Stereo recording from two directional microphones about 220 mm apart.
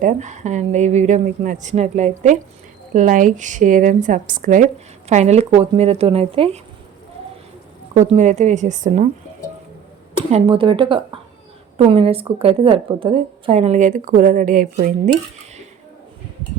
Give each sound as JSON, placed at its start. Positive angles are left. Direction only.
{"t": 0.0, "sound": "a woman's voice", "side_deg": -35}
{"t": 7.9, "sound": "a woman's voice", "side_deg": -30}
{"t": 10.2, "sound": "a woman's voice", "side_deg": -25}